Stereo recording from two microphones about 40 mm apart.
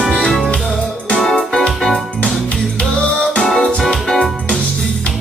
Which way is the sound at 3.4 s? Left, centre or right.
Centre.